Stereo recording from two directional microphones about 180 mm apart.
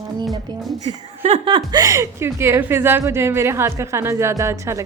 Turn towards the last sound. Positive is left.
turn(degrees=-15)  # may be behind; listen again after turning